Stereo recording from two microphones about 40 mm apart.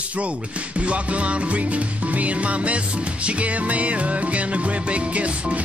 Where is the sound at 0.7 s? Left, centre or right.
Right.